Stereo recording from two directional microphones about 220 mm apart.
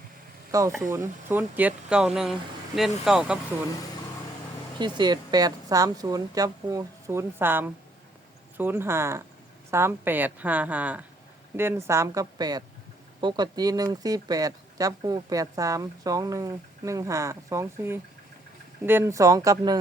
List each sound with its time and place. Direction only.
0.8 s speech: 10° right (ahead or behind)
4.8 s speech: 20° right (ahead or behind)